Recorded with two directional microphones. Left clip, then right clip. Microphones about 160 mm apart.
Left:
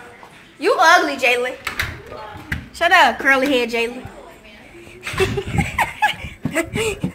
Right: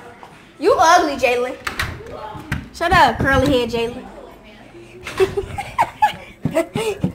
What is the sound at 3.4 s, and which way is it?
Speech, 10° right (ahead or behind).